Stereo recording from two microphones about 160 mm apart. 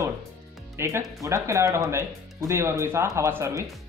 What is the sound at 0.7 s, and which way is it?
Speech, 15° right (ahead or behind).